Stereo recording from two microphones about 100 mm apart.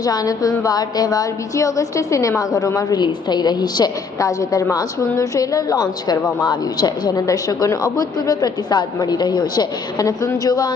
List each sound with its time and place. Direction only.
0.0 s a woman's voice: 40° left (ahead or behind)